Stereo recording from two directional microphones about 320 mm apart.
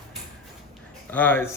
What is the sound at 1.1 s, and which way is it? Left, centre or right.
Speech, centre.